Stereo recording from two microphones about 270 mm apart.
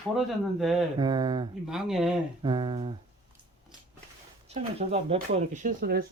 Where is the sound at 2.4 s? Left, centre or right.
Centre.